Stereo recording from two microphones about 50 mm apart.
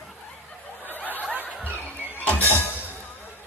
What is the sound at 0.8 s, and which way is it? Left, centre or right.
Snicker, left.